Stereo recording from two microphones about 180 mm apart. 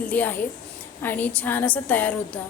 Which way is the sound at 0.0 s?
10° left (ahead or behind).